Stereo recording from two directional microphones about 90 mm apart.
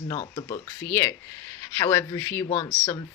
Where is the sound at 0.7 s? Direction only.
30° left (ahead or behind).